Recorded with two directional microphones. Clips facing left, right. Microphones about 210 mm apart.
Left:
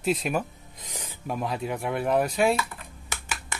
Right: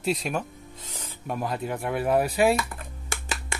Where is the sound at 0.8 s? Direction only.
15° left (ahead or behind).